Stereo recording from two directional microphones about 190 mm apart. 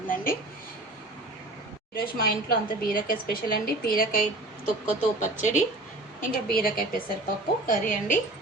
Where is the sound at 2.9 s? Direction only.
45° left (ahead or behind).